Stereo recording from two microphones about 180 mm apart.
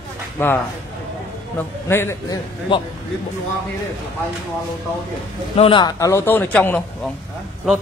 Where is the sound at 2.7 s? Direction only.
30° left (ahead or behind).